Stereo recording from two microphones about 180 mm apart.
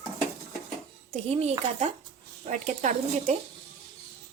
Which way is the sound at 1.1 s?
35° right (ahead or behind).